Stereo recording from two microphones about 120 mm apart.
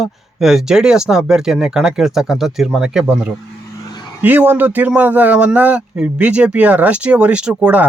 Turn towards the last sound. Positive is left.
turn(degrees=-10)  # may be behind; listen again after turning